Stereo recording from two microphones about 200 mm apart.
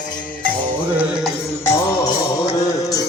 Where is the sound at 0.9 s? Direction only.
5° right (ahead or behind).